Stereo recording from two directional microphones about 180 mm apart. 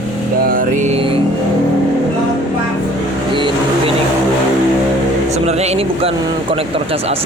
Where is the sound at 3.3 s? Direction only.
25° right (ahead or behind).